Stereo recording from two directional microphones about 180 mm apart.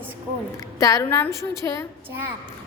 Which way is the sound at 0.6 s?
15° left (ahead or behind).